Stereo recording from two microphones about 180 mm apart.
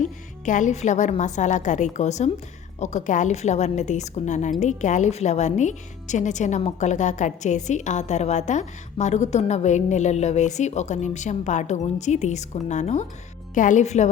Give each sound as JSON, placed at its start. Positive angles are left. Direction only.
{"t": 0.0, "sound": "a woman's voice", "side_deg": 45}